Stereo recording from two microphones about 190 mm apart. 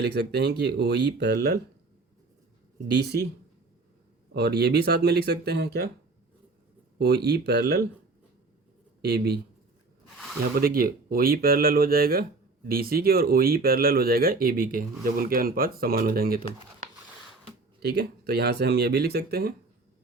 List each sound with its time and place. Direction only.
0.0 s speech: 55° right (ahead or behind)
2.8 s speech: 60° right (ahead or behind)
4.4 s speech: 55° right (ahead or behind)
7.0 s speech: 55° right (ahead or behind)
9.0 s speech: 55° right (ahead or behind)
10.5 s speech: 50° right (ahead or behind)
17.8 s speech: 55° right (ahead or behind)